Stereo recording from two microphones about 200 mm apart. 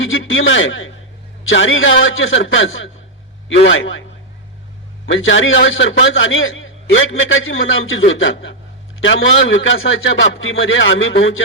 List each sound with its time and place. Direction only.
0.0 s a man's voice: 75° left (ahead or behind)
5.0 s a man's voice: 70° left (ahead or behind)